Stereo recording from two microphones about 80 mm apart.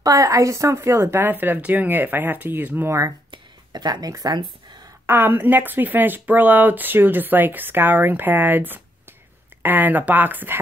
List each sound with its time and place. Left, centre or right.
0.0 s speech: right
3.3 s a sound: right
5.0 s speech: right